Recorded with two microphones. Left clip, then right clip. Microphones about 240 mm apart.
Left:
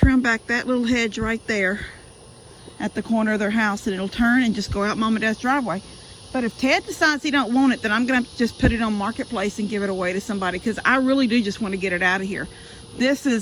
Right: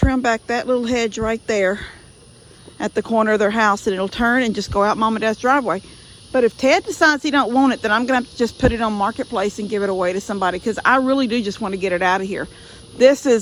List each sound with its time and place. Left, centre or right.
0.1 s speech: centre